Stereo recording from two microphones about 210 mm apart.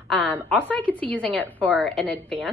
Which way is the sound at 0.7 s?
5° left (ahead or behind).